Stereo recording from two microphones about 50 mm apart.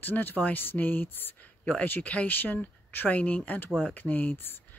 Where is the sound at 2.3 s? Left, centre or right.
Left.